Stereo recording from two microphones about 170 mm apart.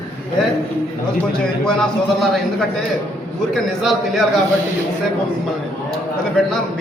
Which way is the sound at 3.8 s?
Centre (ahead or behind).